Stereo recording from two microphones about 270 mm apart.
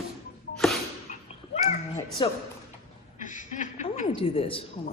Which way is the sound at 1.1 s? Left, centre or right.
Left.